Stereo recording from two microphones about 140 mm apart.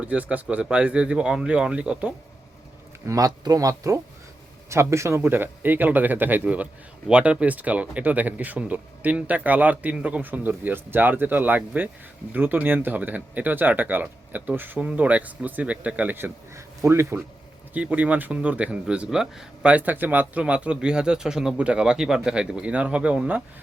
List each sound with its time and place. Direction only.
0.0 s speech: 10° right (ahead or behind)
3.1 s speech: 25° right (ahead or behind); by 23.4 s 10° right (ahead or behind)